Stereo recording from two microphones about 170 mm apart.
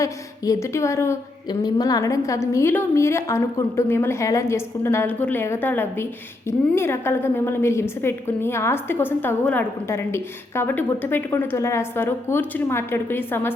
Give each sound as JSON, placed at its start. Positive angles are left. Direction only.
{"t": 0.0, "sound": "a woman's voice", "side_deg": 20}